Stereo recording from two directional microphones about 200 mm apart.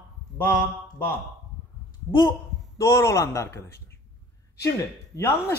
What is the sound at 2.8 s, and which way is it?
Speech, 15° left (ahead or behind).